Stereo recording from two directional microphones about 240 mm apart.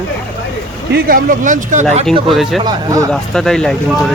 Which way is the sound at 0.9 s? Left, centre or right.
Right.